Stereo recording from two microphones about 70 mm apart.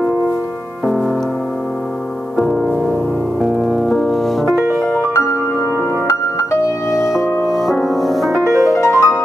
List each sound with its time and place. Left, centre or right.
2.3 s music: centre
3.3 s music: right
3.6 s music: centre
6.9 s music: centre
7.2 s music: left
7.4 s music: centre
8.5 s music: right
8.7 s music: left